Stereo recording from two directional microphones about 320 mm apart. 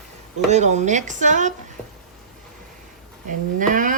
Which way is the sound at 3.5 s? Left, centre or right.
Right.